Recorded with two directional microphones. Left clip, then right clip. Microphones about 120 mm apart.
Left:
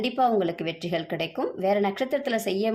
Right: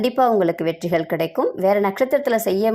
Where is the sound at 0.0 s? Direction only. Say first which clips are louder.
Right 6 dB; 40° right (ahead or behind).